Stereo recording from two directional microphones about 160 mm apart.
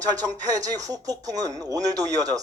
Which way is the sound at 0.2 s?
20° right (ahead or behind).